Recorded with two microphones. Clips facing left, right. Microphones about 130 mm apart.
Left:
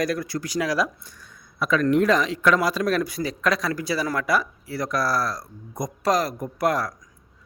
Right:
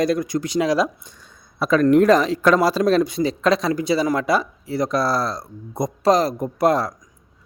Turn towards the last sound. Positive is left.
turn(degrees=-25)  # may be behind; listen again after turning